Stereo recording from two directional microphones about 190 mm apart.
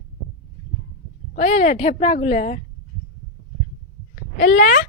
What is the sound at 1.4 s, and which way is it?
Speech, 35° left (ahead or behind).